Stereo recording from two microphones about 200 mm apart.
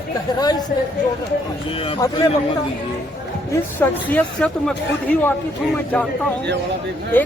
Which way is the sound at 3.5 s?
10° left (ahead or behind).